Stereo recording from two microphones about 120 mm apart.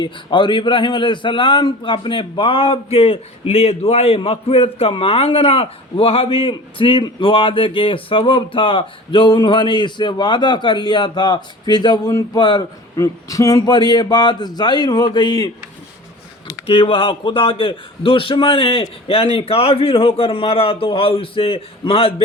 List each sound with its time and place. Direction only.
0.0 s a man's voice: 40° left (ahead or behind)
16.6 s a man's voice: 50° left (ahead or behind)